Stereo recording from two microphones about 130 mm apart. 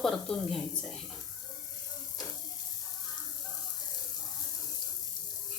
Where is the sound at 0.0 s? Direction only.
Centre (ahead or behind).